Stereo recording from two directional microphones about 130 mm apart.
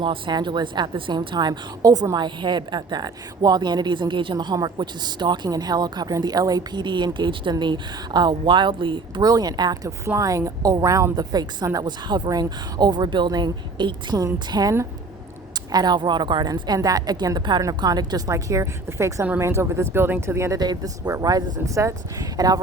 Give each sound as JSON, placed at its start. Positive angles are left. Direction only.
{"t": 0.0, "sound": "a woman's voice", "side_deg": -35}